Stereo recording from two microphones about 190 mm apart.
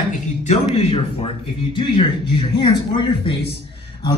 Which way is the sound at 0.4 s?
35° left (ahead or behind).